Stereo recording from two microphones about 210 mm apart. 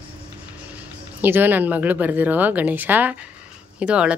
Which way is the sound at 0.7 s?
10° right (ahead or behind).